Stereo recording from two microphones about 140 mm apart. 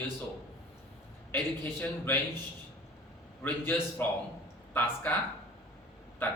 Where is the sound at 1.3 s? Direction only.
15° left (ahead or behind).